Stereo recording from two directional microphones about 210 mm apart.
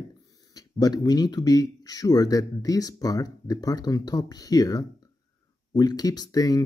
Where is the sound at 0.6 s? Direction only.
15° left (ahead or behind).